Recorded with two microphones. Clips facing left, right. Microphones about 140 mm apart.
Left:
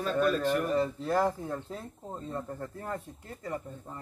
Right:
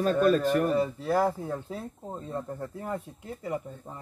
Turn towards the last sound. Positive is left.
turn(degrees=-10)  # may be behind; listen again after turning